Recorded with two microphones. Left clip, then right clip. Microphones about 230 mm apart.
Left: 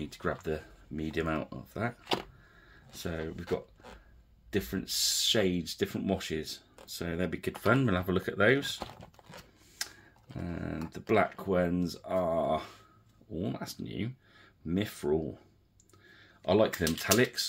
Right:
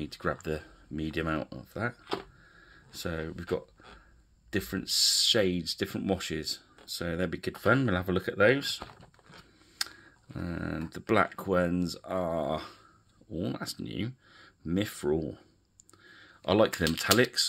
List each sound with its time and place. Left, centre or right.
0.0 s speech: right
9.8 s speech: right